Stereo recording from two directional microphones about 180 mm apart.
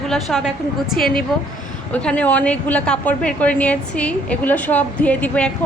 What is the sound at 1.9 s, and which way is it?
A woman's voice, 5° left (ahead or behind).